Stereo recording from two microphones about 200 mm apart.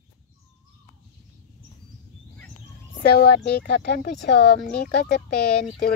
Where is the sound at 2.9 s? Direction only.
50° left (ahead or behind).